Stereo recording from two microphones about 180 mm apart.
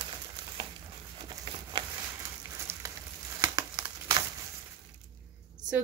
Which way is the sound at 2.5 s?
15° right (ahead or behind).